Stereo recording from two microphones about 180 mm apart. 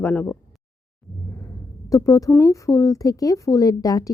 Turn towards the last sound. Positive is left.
turn(degrees=20)  # may be behind; listen again after turning